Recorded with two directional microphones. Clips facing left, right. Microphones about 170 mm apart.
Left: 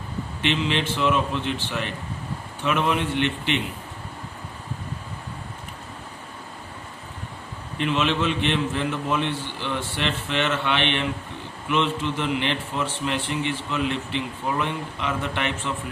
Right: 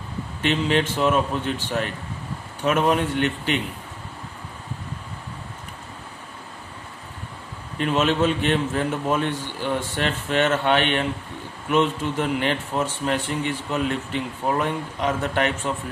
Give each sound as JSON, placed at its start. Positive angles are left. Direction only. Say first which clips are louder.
{"t": 0.4, "sound": "a man's voice", "louder": "right 3 dB", "side_deg": -45}
{"t": 7.8, "sound": "a man's voice", "louder": "right 3 dB", "side_deg": -45}